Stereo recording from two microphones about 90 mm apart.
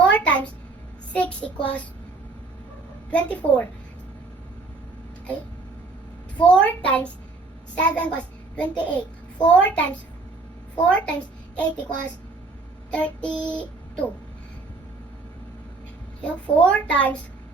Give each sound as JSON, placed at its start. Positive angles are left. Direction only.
{"t": 0.0, "sound": "a sound", "side_deg": 15}
{"t": 1.1, "sound": "a child's voice", "side_deg": 15}
{"t": 3.1, "sound": "a child's voice", "side_deg": 15}
{"t": 6.4, "sound": "a child's voice", "side_deg": 15}
{"t": 12.9, "sound": "child singing", "side_deg": 15}
{"t": 16.2, "sound": "a child's voice", "side_deg": 15}